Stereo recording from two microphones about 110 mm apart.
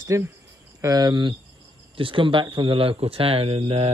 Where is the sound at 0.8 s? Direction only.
35° right (ahead or behind).